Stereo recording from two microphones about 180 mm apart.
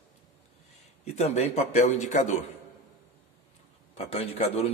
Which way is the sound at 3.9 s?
35° left (ahead or behind).